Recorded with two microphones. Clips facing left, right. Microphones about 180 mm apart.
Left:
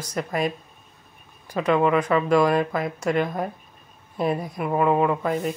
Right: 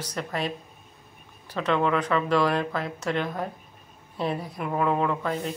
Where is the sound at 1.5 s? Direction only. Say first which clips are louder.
Left 4 dB; 10° left (ahead or behind).